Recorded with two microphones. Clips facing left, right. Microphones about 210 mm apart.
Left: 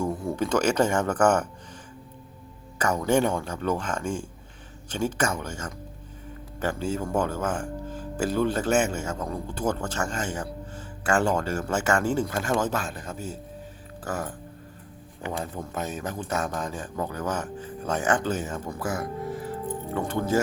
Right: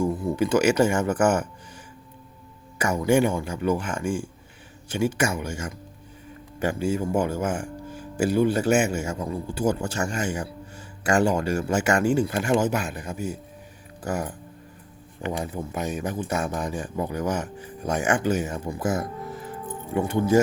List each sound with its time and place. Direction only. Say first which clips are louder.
0.0 s a man's voice: right 3 dB; 5° right (ahead or behind)
2.7 s a man's voice: right 2 dB; 10° right (ahead or behind)